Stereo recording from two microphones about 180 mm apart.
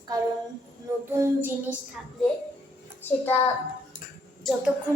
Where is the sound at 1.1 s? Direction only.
15° right (ahead or behind).